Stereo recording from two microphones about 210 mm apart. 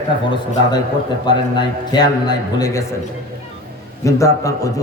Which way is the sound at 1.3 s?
20° left (ahead or behind).